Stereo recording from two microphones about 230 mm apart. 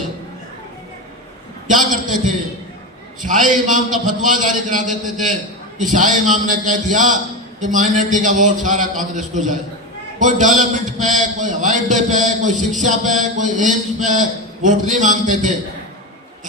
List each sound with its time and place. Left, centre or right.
1.6 s a man's voice: right